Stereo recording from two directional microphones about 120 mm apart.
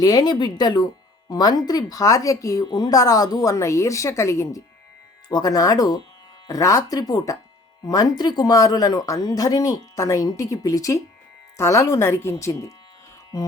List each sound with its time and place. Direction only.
0.0 s speech: 35° left (ahead or behind)